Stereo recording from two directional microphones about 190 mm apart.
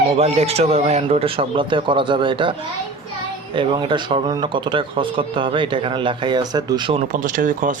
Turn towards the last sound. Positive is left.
turn(degrees=-45)  # may be behind; listen again after turning